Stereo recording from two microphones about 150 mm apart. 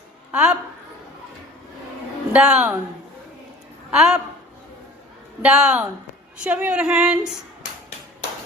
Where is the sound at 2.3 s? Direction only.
5° right (ahead or behind).